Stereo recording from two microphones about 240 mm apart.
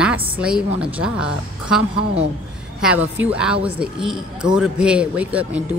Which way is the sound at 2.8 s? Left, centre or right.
Centre.